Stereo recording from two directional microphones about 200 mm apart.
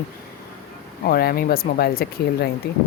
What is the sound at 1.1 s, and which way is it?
Speech, 50° left (ahead or behind).